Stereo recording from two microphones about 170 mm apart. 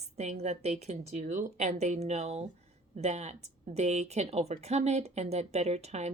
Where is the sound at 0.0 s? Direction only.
40° right (ahead or behind).